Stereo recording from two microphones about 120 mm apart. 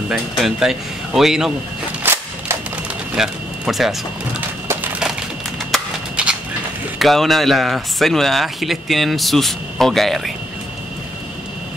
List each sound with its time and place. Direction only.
0.1 s speech: 5° right (ahead or behind)
2.0 s cap gun: 15° right (ahead or behind)
3.2 s speech: 5° right (ahead or behind)
6.2 s a sound: 10° right (ahead or behind)
7.0 s speech: centre (ahead or behind)